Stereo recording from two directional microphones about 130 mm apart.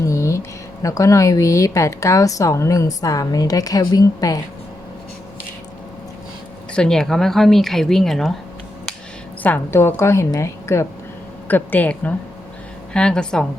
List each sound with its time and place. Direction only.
0.0 s speech: 25° left (ahead or behind)
6.7 s speech: 5° left (ahead or behind)
9.4 s speech: 15° left (ahead or behind)